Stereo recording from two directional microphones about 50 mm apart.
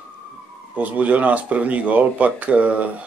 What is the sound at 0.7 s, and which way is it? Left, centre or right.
Speech, right.